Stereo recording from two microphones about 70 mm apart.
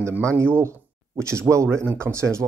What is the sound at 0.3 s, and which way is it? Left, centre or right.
Speech, right.